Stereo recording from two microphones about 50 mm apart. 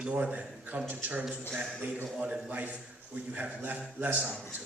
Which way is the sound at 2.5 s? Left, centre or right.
Right.